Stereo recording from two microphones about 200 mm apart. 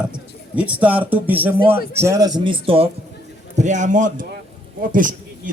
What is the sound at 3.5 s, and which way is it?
A man's voice, 35° right (ahead or behind).